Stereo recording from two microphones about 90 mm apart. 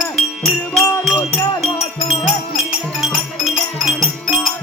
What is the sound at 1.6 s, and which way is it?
Music, 90° left.